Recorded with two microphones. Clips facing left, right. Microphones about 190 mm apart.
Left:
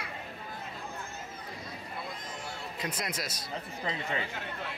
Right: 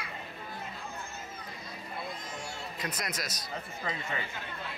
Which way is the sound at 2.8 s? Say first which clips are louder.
Left 1 dB; 25° left (ahead or behind).